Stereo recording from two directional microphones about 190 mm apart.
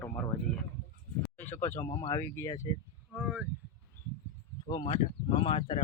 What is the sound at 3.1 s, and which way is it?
Speech, 10° right (ahead or behind).